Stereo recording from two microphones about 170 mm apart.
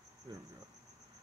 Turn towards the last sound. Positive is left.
turn(degrees=-25)  # may be behind; listen again after turning